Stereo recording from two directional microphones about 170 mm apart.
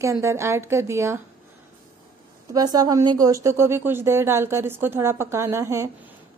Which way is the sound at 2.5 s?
20° right (ahead or behind).